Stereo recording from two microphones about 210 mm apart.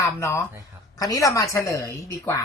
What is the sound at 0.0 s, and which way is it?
Speech, 15° left (ahead or behind).